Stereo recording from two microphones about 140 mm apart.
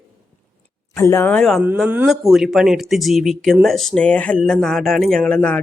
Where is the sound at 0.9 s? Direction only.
20° left (ahead or behind).